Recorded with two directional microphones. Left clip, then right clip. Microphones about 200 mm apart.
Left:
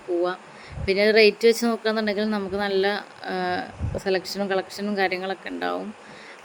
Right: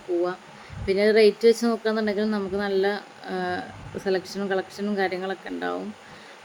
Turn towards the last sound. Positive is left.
turn(degrees=25)  # may be behind; listen again after turning